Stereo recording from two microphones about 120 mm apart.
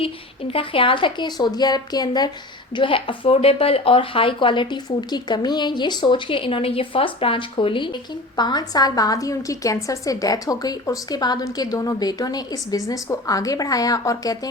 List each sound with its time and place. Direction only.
0.0 s a woman's voice: 50° left (ahead or behind)
8.4 s a woman's voice: 35° left (ahead or behind)